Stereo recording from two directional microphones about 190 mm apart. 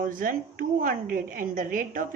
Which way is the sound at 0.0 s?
45° right (ahead or behind).